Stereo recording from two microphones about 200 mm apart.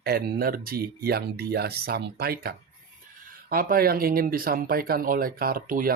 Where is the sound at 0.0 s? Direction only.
50° right (ahead or behind).